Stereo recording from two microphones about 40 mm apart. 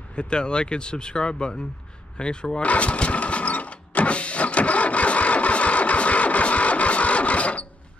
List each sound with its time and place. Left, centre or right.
0.1 s speech: left
2.6 s vehicle: left